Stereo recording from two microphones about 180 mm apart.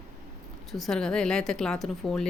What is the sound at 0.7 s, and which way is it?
Speech, centre (ahead or behind).